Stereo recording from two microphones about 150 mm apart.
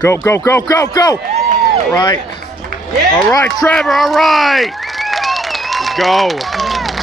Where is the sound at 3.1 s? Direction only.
5° left (ahead or behind).